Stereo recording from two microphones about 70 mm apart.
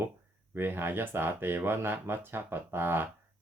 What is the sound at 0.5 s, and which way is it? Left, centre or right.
Speech, right.